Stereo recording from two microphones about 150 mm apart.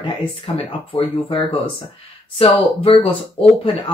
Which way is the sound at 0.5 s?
40° left (ahead or behind).